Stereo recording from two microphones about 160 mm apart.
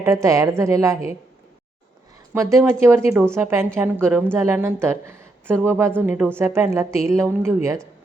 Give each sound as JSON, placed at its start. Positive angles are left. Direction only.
{"t": 0.0, "sound": "a woman's voice", "side_deg": -15}
{"t": 2.3, "sound": "a woman's voice", "side_deg": -20}